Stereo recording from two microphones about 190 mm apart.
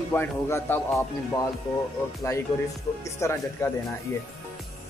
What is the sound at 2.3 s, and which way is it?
Speech, 15° left (ahead or behind).